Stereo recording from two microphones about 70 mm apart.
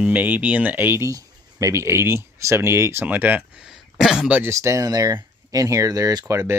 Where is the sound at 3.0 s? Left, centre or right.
Right.